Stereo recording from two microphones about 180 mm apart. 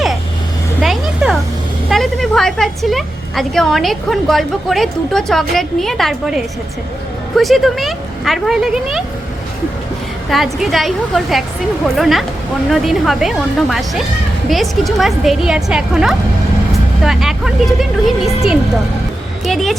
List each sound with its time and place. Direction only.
0.8 s a sound: centre (ahead or behind)
1.9 s a woman's voice: centre (ahead or behind)
10.2 s speech: centre (ahead or behind)